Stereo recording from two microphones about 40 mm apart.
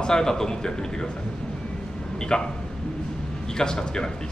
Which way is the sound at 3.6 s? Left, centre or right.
Centre.